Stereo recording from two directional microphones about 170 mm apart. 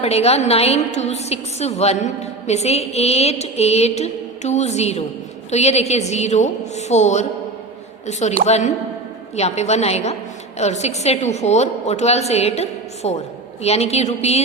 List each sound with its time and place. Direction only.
0.0 s a woman's voice: 35° left (ahead or behind)